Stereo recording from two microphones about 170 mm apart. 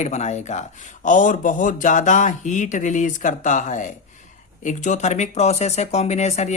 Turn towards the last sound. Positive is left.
turn(degrees=40)  # may be behind; listen again after turning